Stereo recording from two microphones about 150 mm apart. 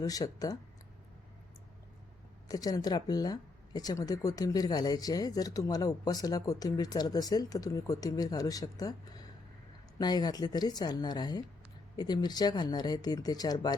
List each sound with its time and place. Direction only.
0.0 s speech: 25° left (ahead or behind)
2.5 s speech: 25° left (ahead or behind)